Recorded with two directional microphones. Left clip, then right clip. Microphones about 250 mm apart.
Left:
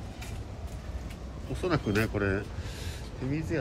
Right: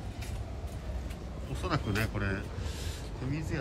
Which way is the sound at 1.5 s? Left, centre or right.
Centre.